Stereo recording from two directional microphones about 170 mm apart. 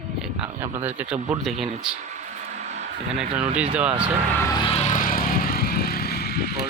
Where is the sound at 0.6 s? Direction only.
15° right (ahead or behind).